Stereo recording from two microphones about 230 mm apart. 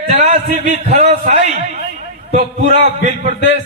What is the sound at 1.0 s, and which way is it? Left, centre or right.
Speech, right.